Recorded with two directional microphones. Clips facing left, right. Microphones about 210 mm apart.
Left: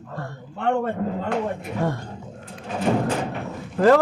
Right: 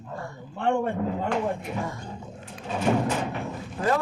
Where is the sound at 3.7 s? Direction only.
75° left (ahead or behind).